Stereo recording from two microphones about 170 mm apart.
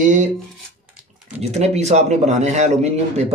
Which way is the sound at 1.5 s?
40° right (ahead or behind).